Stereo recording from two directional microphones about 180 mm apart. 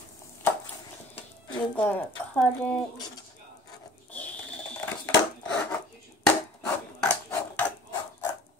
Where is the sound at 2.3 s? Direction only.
5° left (ahead or behind).